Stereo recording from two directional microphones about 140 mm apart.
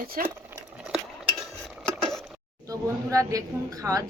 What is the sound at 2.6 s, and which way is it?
A woman's voice, 25° right (ahead or behind).